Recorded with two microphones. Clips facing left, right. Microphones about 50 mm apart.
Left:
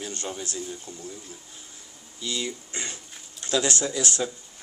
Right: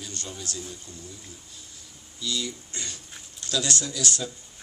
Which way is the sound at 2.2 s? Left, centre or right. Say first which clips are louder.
Even; left.